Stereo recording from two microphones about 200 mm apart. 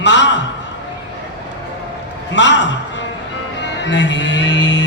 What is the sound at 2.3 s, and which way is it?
Speech, 65° left (ahead or behind).